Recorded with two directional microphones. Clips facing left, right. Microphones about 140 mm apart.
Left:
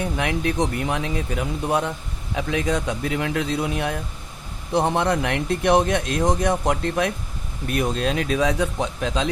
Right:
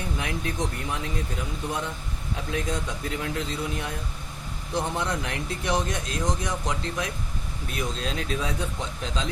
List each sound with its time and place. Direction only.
0.2 s speech: 70° left (ahead or behind)
2.3 s speech: 90° left; by 9.3 s 70° left (ahead or behind)